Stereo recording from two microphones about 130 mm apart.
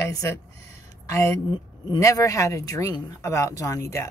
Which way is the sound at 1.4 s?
30° left (ahead or behind).